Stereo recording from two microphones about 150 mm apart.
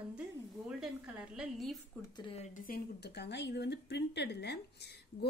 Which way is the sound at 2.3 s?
65° left (ahead or behind).